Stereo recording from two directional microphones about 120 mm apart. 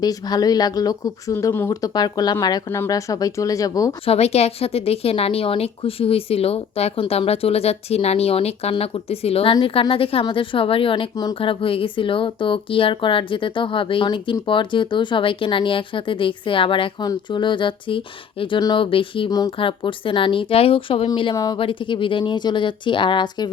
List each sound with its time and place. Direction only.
0.0 s speech: 30° left (ahead or behind)
2.6 s speech: 25° left (ahead or behind)
4.0 s a woman's voice: 60° left (ahead or behind)
21.3 s speech: 30° left (ahead or behind)
21.6 s speech: 45° left (ahead or behind)